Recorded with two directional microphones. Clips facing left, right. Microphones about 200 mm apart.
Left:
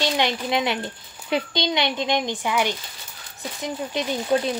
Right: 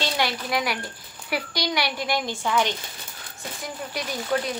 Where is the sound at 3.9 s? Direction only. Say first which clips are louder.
Left 4 dB; 25° left (ahead or behind).